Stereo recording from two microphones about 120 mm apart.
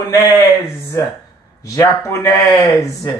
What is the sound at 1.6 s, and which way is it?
Speech, 25° left (ahead or behind).